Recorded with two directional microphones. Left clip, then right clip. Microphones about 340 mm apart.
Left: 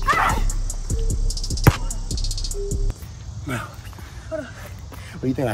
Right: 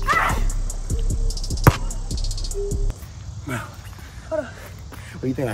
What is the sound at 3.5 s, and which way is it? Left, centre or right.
Dog, centre.